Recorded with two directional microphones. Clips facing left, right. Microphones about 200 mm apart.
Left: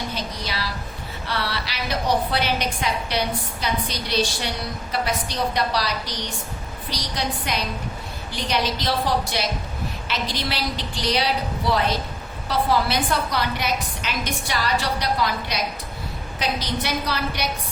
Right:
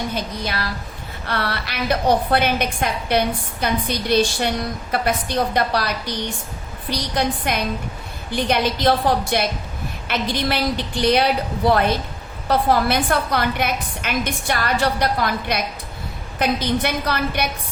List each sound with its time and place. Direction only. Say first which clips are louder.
0.1 s a woman's voice: right 4 dB; 50° right (ahead or behind)
7.2 s a woman's voice: right 5 dB; 55° right (ahead or behind)